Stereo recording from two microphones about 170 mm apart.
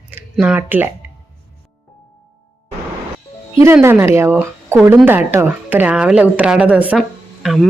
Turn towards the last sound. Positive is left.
turn(degrees=0)  # may be behind; listen again after turning